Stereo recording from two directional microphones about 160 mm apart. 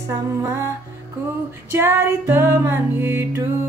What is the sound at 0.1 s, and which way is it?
Music, 20° right (ahead or behind).